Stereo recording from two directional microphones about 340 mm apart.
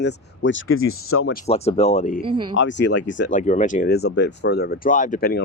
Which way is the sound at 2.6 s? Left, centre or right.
Left.